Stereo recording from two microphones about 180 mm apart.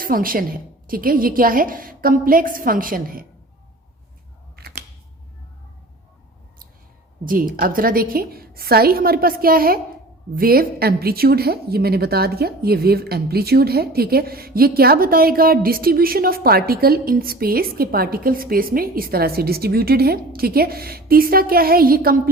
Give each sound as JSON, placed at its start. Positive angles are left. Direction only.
{"t": 0.0, "sound": "a woman's voice", "side_deg": -50}
{"t": 4.5, "sound": "scissors", "side_deg": -60}
{"t": 7.3, "sound": "a woman's voice", "side_deg": -50}